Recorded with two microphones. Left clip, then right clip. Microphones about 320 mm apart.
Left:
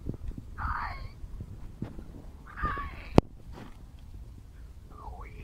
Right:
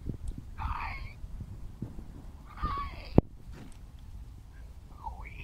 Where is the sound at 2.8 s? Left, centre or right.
Centre.